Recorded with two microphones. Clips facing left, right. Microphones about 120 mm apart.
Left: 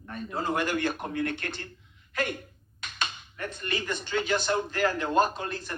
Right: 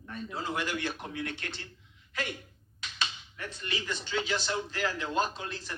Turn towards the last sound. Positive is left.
turn(degrees=50)  # may be behind; listen again after turning